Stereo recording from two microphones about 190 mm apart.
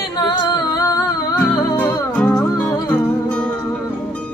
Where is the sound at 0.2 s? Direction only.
20° left (ahead or behind).